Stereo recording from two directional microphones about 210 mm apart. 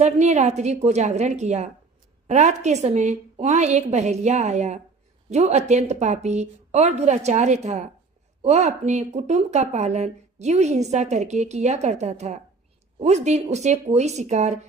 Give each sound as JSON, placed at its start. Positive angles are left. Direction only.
{"t": 0.0, "sound": "speech", "side_deg": -35}